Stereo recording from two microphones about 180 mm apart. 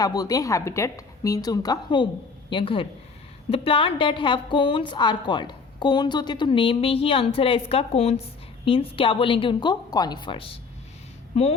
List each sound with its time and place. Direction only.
0.0 s a woman's voice: 20° left (ahead or behind)